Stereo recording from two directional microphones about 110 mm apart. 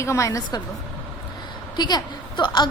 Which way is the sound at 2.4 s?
40° left (ahead or behind).